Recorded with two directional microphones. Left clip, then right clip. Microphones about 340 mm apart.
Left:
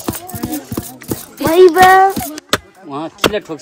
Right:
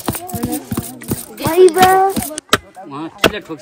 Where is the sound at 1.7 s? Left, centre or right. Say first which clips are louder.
Left 3 dB; left.